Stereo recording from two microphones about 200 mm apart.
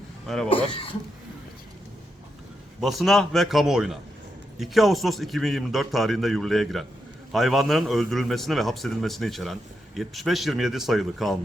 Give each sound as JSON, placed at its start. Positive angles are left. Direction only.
{"t": 0.5, "sound": "speech", "side_deg": 25}
{"t": 2.8, "sound": "a man's voice", "side_deg": 0}